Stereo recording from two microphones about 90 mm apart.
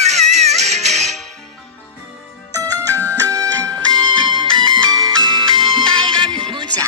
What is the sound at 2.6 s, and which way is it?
Music, 40° right (ahead or behind).